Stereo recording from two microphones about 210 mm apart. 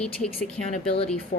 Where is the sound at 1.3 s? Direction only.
40° left (ahead or behind).